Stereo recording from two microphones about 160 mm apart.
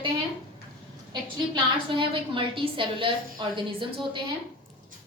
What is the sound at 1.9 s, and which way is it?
A woman's voice, 30° right (ahead or behind).